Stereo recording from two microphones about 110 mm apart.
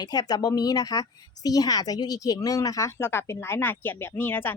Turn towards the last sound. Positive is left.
turn(degrees=20)  # may be behind; listen again after turning